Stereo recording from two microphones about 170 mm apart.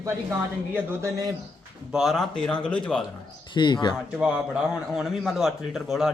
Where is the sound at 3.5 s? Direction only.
25° left (ahead or behind).